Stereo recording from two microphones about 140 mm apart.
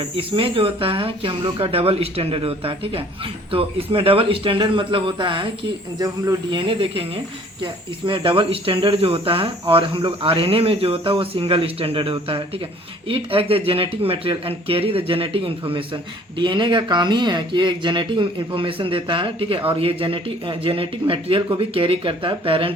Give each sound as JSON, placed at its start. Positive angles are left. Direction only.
{"t": 0.0, "sound": "speech", "side_deg": -40}